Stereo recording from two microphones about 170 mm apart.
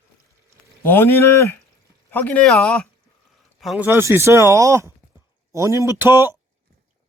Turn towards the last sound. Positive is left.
turn(degrees=-15)  # may be behind; listen again after turning